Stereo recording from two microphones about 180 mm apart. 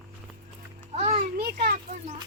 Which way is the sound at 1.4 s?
60° right (ahead or behind).